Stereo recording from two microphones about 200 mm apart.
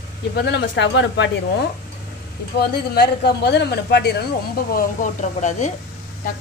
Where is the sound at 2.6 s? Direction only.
50° left (ahead or behind); by 5.7 s 35° left (ahead or behind).